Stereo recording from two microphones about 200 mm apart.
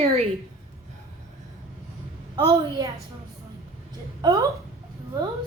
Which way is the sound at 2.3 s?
20° right (ahead or behind).